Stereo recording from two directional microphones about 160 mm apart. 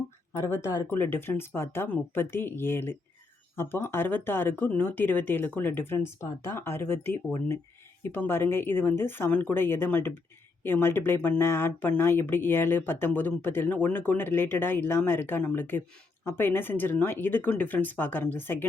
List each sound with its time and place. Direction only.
0.4 s speech: 20° left (ahead or behind)